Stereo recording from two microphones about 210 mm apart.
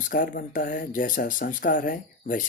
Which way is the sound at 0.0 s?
40° left (ahead or behind).